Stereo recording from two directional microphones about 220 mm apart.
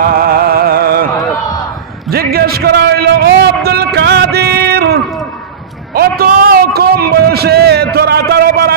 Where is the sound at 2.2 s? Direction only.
45° right (ahead or behind).